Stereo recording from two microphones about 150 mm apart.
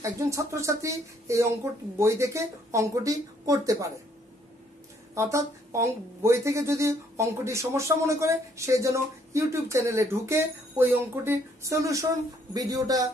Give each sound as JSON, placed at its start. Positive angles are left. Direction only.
{"t": 0.0, "sound": "speech", "side_deg": -20}
{"t": 5.1, "sound": "speech", "side_deg": -20}